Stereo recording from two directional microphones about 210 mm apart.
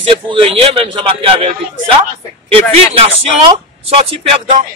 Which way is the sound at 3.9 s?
30° right (ahead or behind).